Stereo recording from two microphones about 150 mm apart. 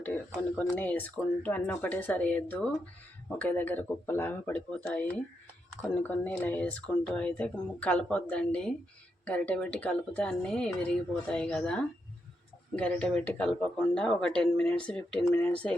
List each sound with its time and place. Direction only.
0.5 s speech: 10° left (ahead or behind)